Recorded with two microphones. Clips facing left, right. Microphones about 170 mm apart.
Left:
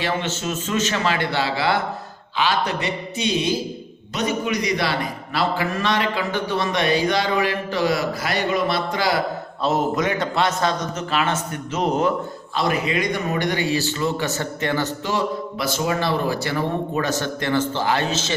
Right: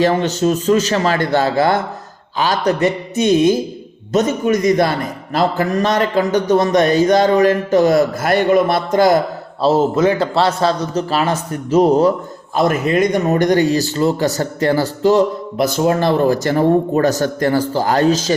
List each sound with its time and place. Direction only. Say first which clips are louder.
0.0 s a man's voice: right 10 dB; 40° right (ahead or behind)
9.6 s speech: right 8 dB; 30° right (ahead or behind)
12.5 s speech: right 7 dB; 45° right (ahead or behind)